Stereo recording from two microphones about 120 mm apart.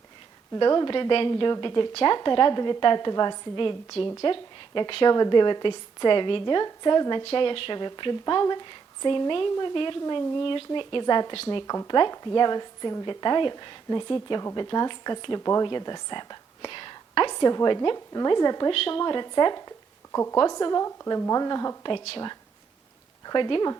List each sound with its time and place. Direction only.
0.5 s a woman's voice: 35° left (ahead or behind)
1.9 s a woman's voice: 50° left (ahead or behind); by 18.7 s 35° left (ahead or behind)
18.7 s a woman's voice: 50° left (ahead or behind); by 21.8 s 30° left (ahead or behind)
23.2 s a woman's voice: 40° left (ahead or behind)